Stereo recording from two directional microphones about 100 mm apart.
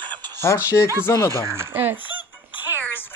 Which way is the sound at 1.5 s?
25° right (ahead or behind).